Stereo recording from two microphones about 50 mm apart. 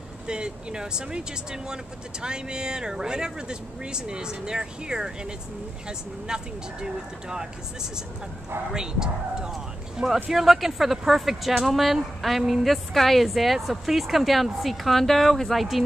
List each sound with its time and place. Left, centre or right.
0.3 s speech: centre
8.7 s speech: centre
10.3 s a woman's voice: centre